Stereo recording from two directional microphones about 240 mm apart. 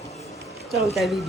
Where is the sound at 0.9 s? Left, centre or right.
Centre.